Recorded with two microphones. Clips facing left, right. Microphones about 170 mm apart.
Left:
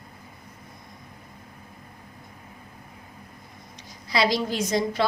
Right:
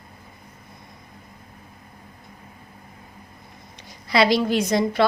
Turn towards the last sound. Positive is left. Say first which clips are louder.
# right 4 dB
turn(degrees=-65)  # may be behind; listen again after turning